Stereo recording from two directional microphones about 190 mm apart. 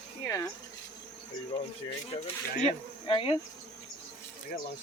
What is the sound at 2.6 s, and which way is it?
Speech, 25° left (ahead or behind).